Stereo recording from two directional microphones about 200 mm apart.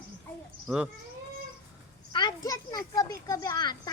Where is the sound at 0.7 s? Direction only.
5° right (ahead or behind).